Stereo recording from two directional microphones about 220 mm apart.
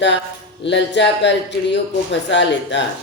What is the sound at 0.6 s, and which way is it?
Speech, 55° left (ahead or behind).